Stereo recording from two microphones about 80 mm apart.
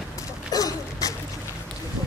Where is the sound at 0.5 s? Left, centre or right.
Left.